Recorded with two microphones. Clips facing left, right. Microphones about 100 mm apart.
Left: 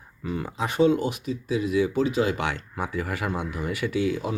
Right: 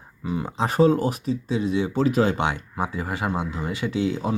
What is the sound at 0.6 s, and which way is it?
Speech, 40° right (ahead or behind).